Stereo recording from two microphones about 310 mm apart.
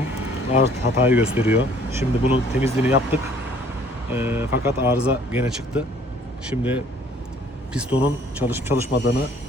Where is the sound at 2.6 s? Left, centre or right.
Centre.